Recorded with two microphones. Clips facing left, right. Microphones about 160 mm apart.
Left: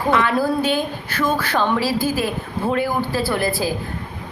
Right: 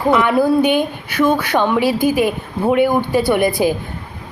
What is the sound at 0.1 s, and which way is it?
Speech, 20° right (ahead or behind).